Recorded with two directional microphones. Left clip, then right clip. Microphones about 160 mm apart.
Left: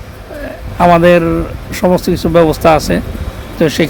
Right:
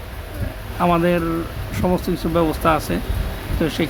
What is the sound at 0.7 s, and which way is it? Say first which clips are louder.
Speech: left 11 dB; 35° left (ahead or behind).